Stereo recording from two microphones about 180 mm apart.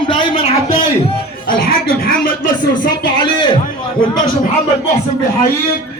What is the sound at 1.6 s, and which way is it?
Speech, 55° left (ahead or behind).